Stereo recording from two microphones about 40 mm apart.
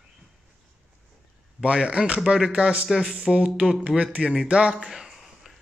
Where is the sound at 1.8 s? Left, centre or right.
Right.